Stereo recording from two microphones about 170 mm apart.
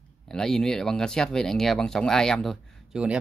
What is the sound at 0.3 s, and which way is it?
Speech, 5° left (ahead or behind).